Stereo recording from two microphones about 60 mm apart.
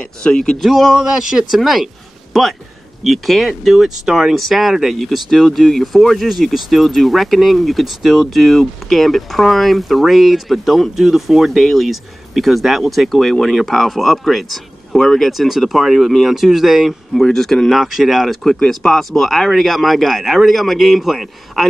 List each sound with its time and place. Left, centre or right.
0.0 s speech: centre
0.6 s speech: centre
3.0 s speech: centre